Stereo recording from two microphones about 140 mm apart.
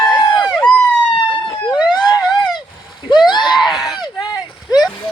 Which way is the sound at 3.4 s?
Centre (ahead or behind).